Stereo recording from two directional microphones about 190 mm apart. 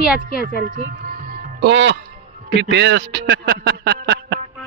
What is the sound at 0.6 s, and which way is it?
Music, 50° right (ahead or behind).